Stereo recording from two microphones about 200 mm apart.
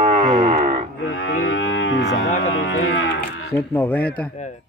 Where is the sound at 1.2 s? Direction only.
50° left (ahead or behind).